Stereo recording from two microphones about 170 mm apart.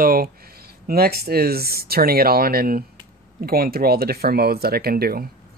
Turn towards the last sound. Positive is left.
turn(degrees=-60)  # may be behind; listen again after turning